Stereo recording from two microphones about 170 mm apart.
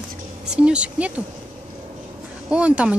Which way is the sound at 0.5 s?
5° right (ahead or behind).